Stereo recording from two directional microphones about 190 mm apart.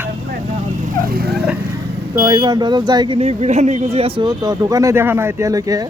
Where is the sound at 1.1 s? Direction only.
55° right (ahead or behind).